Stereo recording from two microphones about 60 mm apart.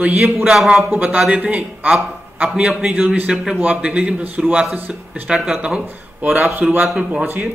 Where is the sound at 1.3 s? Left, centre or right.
Right.